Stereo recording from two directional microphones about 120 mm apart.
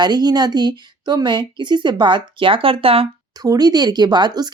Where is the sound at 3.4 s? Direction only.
35° right (ahead or behind).